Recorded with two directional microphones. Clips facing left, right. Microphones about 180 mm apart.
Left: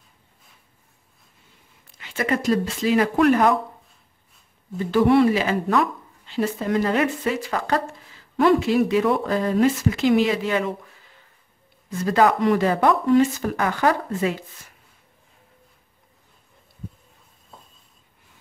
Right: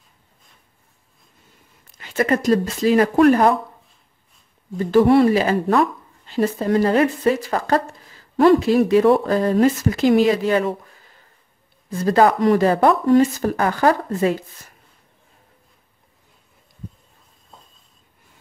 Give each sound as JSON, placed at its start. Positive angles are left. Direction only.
{"t": 2.0, "sound": "speech", "side_deg": -40}
{"t": 4.7, "sound": "speech", "side_deg": -40}